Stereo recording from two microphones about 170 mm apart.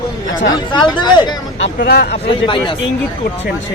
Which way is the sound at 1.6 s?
80° left.